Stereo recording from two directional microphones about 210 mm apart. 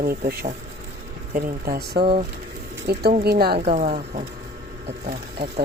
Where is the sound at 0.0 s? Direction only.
45° right (ahead or behind).